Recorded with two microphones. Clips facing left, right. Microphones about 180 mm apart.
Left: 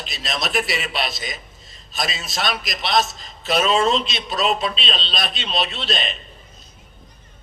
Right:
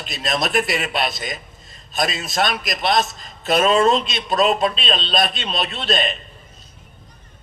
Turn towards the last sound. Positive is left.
turn(degrees=-50)  # may be behind; listen again after turning